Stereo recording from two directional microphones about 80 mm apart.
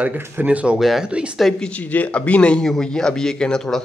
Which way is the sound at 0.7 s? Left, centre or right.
Centre.